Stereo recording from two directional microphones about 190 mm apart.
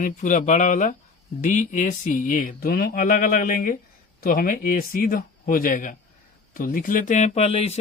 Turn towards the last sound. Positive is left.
turn(degrees=35)  # may be behind; listen again after turning